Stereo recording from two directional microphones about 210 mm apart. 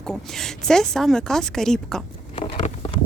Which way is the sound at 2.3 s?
30° left (ahead or behind).